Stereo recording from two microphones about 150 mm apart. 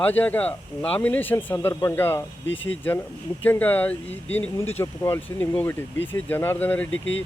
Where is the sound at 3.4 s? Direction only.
10° left (ahead or behind).